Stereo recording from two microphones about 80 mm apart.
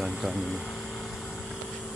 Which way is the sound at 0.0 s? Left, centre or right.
Centre.